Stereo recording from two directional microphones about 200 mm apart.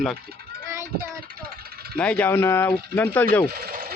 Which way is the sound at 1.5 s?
50° right (ahead or behind).